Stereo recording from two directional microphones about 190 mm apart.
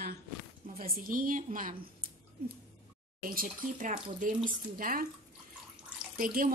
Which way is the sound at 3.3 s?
45° right (ahead or behind).